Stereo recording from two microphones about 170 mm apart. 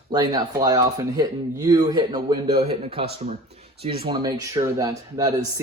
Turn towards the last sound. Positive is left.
turn(degrees=-20)  # may be behind; listen again after turning